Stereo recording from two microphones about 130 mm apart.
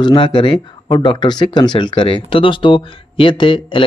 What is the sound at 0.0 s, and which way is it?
Speech, 40° left (ahead or behind).